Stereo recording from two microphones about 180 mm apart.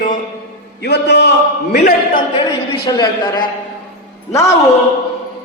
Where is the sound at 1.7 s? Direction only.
60° left (ahead or behind).